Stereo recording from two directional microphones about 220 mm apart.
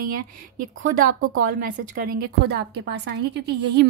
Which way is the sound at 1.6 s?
40° right (ahead or behind).